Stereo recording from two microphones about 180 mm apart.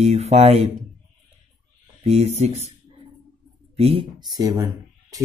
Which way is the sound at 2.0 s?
35° right (ahead or behind).